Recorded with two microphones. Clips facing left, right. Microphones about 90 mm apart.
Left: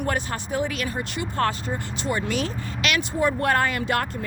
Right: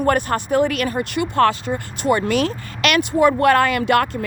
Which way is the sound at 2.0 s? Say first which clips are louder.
Right 8 dB; 65° right (ahead or behind).